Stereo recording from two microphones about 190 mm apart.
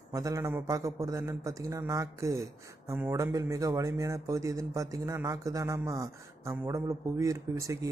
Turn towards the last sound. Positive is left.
turn(degrees=-15)  # may be behind; listen again after turning